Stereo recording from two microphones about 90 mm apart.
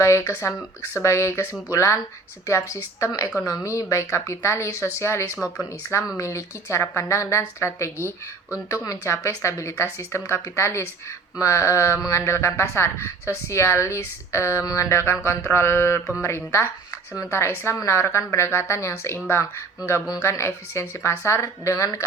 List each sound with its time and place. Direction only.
0.0 s a woman's voice: 35° left (ahead or behind)